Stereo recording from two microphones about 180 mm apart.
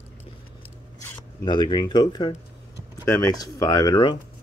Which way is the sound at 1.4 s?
25° left (ahead or behind).